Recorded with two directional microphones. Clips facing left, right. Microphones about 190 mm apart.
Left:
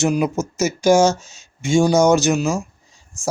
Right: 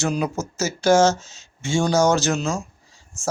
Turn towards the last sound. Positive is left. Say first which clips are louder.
# even
turn(degrees=20)  # may be behind; listen again after turning